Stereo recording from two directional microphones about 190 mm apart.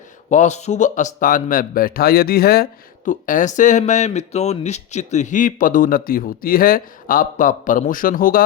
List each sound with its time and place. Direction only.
0.3 s speech: 40° left (ahead or behind)
3.1 s speech: 45° left (ahead or behind)